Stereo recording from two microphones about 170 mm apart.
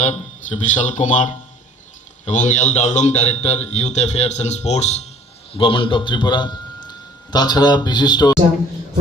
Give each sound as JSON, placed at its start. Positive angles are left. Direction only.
{"t": 0.0, "sound": "a man's voice", "side_deg": 45}